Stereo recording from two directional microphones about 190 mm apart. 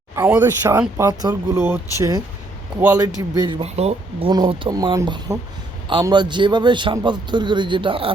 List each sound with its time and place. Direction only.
0.2 s speech: 10° right (ahead or behind)
0.8 s a man's voice: 20° right (ahead or behind)